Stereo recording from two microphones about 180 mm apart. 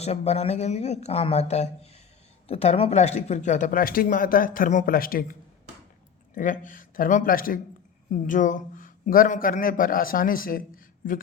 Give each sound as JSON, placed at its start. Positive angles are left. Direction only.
{"t": 0.0, "sound": "speech", "side_deg": 35}